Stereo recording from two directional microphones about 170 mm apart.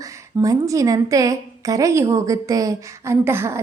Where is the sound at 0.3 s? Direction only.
20° right (ahead or behind).